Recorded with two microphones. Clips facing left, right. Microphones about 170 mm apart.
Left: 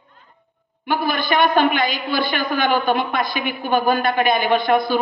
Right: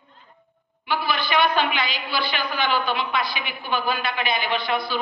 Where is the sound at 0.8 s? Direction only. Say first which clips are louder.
Left 4 dB; 50° left (ahead or behind).